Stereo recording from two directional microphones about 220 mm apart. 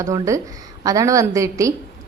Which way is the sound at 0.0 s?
15° right (ahead or behind).